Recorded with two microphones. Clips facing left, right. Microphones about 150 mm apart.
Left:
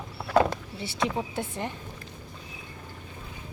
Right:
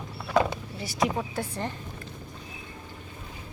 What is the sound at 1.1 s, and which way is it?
Speech, 20° left (ahead or behind).